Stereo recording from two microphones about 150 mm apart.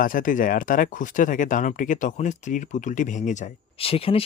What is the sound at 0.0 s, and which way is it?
Speech, 65° left (ahead or behind).